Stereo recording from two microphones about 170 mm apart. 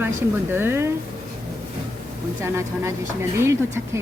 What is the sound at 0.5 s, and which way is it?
Speech, 15° right (ahead or behind).